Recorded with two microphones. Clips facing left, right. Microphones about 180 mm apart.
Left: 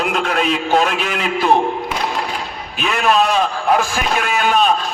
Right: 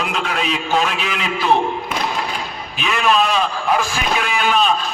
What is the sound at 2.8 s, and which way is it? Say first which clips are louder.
A man's voice: left 2 dB; 50° left (ahead or behind).